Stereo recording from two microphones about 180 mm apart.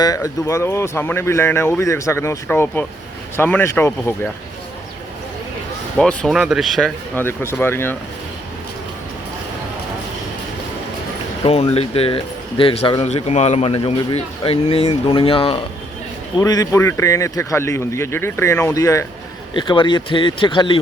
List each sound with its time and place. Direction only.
0.0 s speech: 20° left (ahead or behind)
6.0 s speech: 5° left (ahead or behind)
7.2 s speech: 15° left (ahead or behind)
11.4 s speech: 35° left (ahead or behind)
16.4 s speech: 20° left (ahead or behind)